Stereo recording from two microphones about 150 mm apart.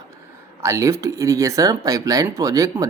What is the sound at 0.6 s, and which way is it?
Speech, 20° right (ahead or behind).